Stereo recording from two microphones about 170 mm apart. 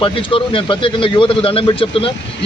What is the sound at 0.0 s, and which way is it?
A man's voice, 30° left (ahead or behind).